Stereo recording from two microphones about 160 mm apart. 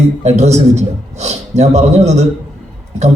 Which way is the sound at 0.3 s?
45° right (ahead or behind).